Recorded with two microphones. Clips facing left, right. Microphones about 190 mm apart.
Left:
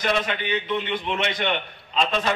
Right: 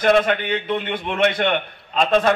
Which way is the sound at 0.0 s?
50° right (ahead or behind).